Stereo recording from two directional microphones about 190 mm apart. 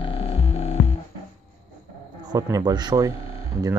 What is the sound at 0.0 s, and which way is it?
Hum, 30° left (ahead or behind).